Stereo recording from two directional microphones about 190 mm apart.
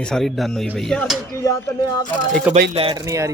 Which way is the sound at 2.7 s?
25° right (ahead or behind).